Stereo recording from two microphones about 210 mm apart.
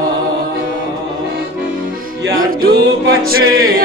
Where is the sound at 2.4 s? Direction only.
45° right (ahead or behind).